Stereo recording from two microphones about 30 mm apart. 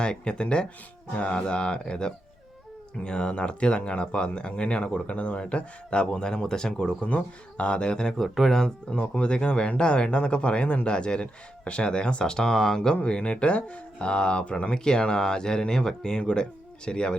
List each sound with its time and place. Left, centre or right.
0.0 s speech: left
5.4 s speech: left
7.0 s speech: left
8.2 s speech: centre
8.9 s speech: left
12.2 s speech: left
13.0 s speech: left
13.6 s speech: left